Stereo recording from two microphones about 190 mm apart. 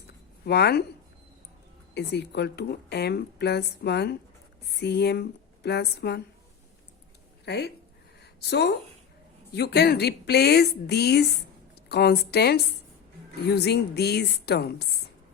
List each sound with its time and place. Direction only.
0.4 s speech: 60° left (ahead or behind)
2.0 s speech: 65° left (ahead or behind)
7.4 s speech: 60° left (ahead or behind)